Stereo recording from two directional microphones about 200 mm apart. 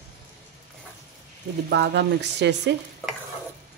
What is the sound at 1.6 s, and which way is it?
Speech, 55° right (ahead or behind).